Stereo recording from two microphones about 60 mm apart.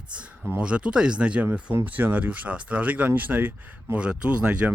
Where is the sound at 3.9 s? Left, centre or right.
Centre.